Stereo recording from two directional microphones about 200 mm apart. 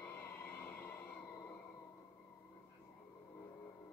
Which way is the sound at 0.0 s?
10° left (ahead or behind).